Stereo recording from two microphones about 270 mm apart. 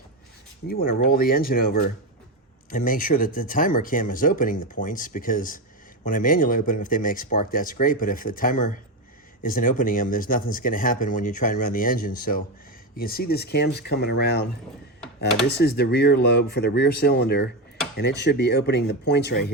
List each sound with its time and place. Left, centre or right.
0.7 s speech: left
15.4 s speech: left